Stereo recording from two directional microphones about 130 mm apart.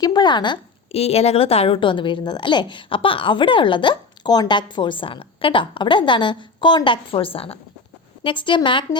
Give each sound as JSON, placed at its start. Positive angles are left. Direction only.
{"t": 0.0, "sound": "a woman's voice", "side_deg": 35}